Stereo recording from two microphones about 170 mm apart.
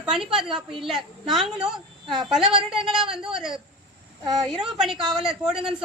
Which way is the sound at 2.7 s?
5° right (ahead or behind).